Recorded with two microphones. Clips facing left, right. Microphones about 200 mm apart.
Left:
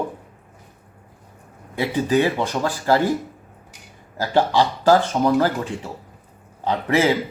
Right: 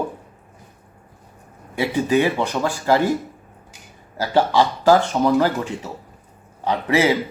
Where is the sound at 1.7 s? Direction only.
15° right (ahead or behind).